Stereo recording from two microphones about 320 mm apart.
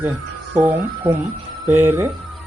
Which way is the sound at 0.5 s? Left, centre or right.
Centre.